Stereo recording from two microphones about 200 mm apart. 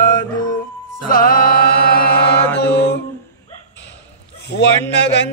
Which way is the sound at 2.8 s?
60° left (ahead or behind).